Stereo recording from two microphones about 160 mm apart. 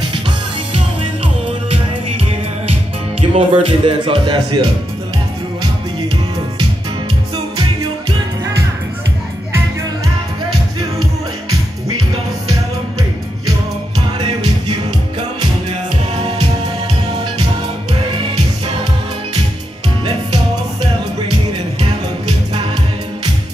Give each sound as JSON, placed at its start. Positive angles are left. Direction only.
{"t": 0.7, "sound": "music", "side_deg": -35}
{"t": 3.2, "sound": "speech", "side_deg": -35}